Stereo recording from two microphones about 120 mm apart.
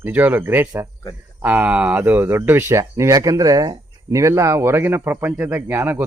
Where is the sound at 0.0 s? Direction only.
15° right (ahead or behind).